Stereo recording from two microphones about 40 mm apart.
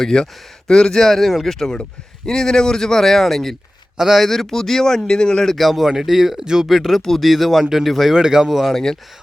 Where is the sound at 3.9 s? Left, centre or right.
Centre.